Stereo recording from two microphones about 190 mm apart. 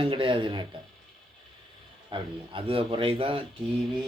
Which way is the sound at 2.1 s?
30° right (ahead or behind).